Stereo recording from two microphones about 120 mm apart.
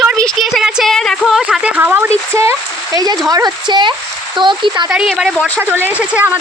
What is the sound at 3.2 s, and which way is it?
Speech, 30° right (ahead or behind).